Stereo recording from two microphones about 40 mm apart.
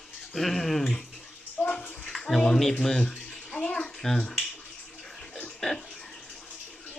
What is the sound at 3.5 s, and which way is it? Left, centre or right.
Bathtub, centre.